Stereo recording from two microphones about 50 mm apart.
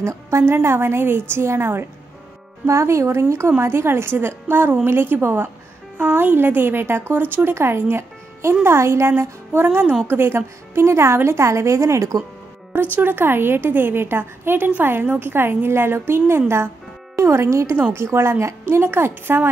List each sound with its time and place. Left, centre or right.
0.0 s a woman's voice: right
2.6 s a woman's voice: right
7.5 s a woman's voice: right
9.2 s a woman's voice: right
12.9 s a woman's voice: right
17.9 s a woman's voice: right